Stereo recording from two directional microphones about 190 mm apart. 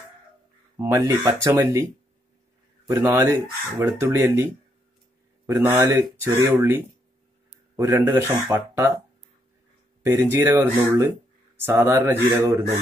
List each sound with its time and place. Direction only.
0.7 s speech: 15° right (ahead or behind)
2.9 s speech: 15° right (ahead or behind)
5.5 s speech: 10° right (ahead or behind)
10.0 s speech: 15° right (ahead or behind)